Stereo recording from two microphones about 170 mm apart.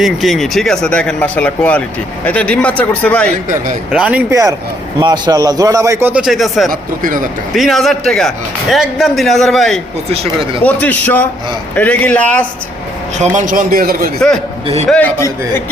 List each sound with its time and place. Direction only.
0.0 s a man's voice: centre (ahead or behind)
3.9 s speech: 5° right (ahead or behind)
4.9 s speech: 25° right (ahead or behind); by 6.7 s centre (ahead or behind)
6.7 s speech: 55° right (ahead or behind)
7.5 s a man's voice: centre (ahead or behind)
13.1 s a man's voice: 45° right (ahead or behind)
14.8 s a man's voice: 5° left (ahead or behind)